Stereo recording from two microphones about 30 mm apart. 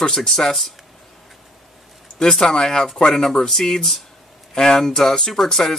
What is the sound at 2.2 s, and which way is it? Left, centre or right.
Speech, left.